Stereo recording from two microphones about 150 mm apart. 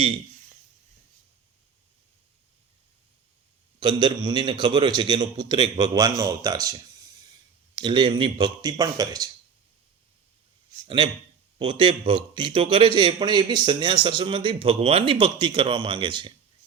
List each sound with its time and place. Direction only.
3.8 s a man's voice: 30° right (ahead or behind)
10.8 s a man's voice: 35° right (ahead or behind)